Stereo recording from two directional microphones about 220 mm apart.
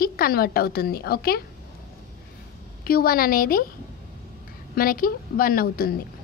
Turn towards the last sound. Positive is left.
turn(degrees=40)  # may be behind; listen again after turning